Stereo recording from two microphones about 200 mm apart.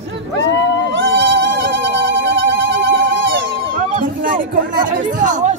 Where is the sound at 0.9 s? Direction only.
60° right (ahead or behind).